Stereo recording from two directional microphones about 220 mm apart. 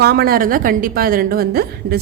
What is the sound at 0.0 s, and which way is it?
A woman's voice, 45° right (ahead or behind).